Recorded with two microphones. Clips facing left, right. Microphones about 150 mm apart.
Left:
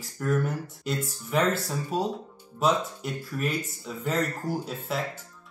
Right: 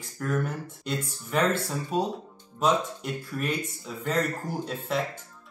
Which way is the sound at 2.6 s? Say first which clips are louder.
Even; 5° left (ahead or behind).